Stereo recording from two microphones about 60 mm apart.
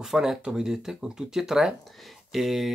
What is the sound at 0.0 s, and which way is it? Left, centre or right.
Speech, centre.